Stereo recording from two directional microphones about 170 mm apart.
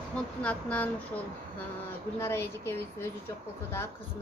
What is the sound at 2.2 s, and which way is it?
Speech, 15° left (ahead or behind).